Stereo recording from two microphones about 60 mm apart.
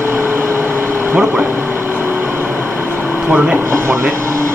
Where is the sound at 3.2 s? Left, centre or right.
Right.